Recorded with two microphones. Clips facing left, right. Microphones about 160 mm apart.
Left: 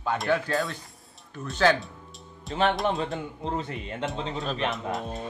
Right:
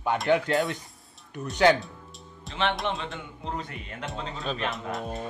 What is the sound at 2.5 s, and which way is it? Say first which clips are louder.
Speech: left 4 dB; 40° left (ahead or behind).